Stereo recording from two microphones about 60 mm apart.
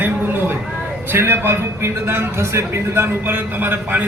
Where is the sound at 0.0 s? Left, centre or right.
Right.